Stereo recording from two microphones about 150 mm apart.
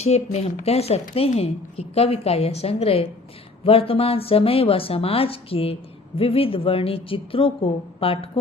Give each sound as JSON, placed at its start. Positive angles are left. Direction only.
{"t": 0.0, "sound": "a woman's voice", "side_deg": 45}